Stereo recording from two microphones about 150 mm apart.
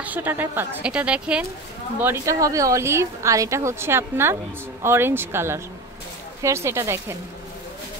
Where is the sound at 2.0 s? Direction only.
20° right (ahead or behind).